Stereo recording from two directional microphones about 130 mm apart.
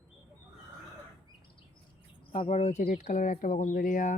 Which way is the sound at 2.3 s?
55° left (ahead or behind).